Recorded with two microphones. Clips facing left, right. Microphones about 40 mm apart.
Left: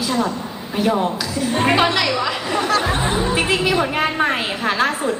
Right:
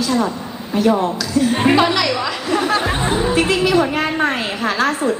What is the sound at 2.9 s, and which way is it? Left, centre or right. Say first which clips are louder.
A woman's voice: right 1 dB; centre.